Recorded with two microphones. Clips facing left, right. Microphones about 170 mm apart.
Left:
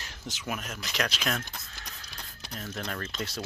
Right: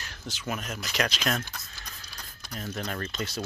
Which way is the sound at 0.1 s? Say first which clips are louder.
Right 2 dB; 20° left (ahead or behind).